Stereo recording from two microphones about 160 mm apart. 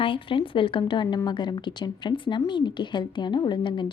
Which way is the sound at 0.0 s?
35° left (ahead or behind).